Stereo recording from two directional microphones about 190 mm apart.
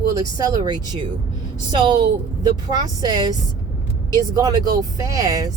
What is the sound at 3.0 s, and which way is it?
Speech, 20° right (ahead or behind).